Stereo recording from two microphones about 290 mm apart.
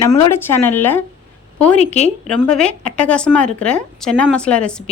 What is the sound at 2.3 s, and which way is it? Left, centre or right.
Speech, centre.